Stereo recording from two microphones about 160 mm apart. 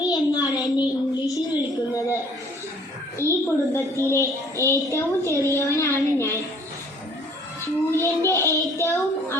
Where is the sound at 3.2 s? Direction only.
15° right (ahead or behind).